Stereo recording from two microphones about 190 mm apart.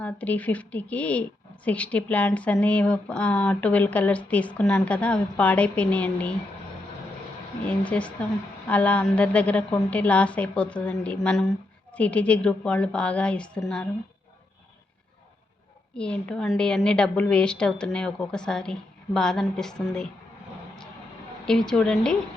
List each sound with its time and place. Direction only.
0.0 s speech: 10° left (ahead or behind)
7.6 s speech: 5° left (ahead or behind)
16.0 s a woman's voice: 5° left (ahead or behind)
21.7 s a woman's voice: 5° left (ahead or behind)